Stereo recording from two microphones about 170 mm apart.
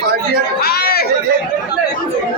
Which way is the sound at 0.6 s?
65° left (ahead or behind).